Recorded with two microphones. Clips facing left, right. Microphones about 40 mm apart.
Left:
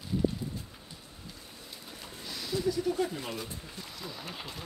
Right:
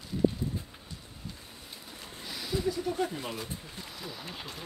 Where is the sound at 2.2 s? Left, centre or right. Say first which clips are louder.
Right 1 dB; centre.